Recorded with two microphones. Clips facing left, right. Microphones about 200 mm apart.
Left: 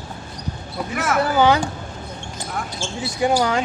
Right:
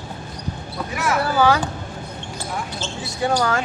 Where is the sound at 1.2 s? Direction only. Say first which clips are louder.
Left 2 dB; 20° left (ahead or behind).